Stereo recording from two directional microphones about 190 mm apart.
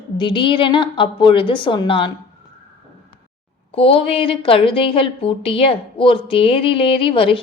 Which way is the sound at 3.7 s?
30° left (ahead or behind).